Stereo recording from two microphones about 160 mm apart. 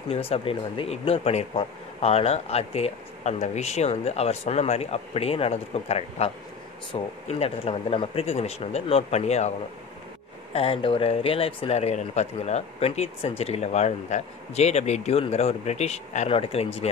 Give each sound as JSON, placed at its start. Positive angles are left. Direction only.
{"t": 0.1, "sound": "speech", "side_deg": 35}
{"t": 10.5, "sound": "speech", "side_deg": 35}